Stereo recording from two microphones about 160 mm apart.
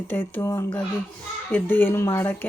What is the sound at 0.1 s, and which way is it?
Speech, 15° left (ahead or behind).